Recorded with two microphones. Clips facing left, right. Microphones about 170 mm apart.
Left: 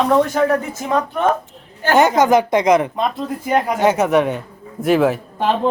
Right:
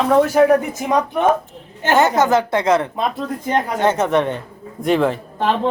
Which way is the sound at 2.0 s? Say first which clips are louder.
Left 2 dB; 15° left (ahead or behind).